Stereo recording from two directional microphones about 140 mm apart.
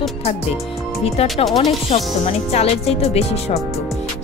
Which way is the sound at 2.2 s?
50° left (ahead or behind).